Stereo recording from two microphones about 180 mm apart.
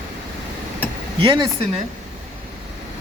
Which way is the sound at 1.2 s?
30° right (ahead or behind).